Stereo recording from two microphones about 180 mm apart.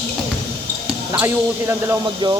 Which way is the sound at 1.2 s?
15° right (ahead or behind).